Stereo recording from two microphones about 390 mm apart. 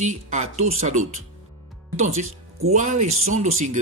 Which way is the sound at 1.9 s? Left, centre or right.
Centre.